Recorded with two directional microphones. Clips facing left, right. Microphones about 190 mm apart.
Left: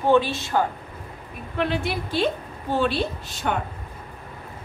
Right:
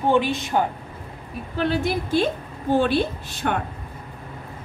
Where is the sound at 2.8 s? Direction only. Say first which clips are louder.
Right 3 dB; 55° right (ahead or behind).